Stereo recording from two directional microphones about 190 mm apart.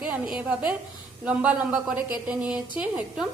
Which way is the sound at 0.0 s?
5° right (ahead or behind).